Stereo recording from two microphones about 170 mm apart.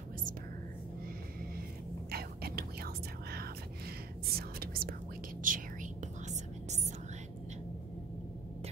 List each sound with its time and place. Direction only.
2.0 s whispering: 65° right (ahead or behind)
5.4 s whispering: 50° right (ahead or behind)